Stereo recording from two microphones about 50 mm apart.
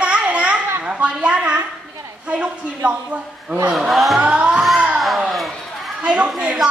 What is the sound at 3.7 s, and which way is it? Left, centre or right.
Speech, centre.